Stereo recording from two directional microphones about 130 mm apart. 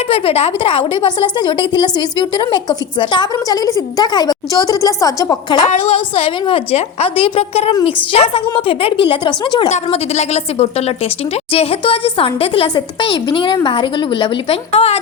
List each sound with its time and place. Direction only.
0.1 s a woman's voice: 50° left (ahead or behind); by 5.6 s 30° left (ahead or behind)
5.9 s a woman's voice: 45° left (ahead or behind)
9.6 s a woman's voice: 60° left (ahead or behind)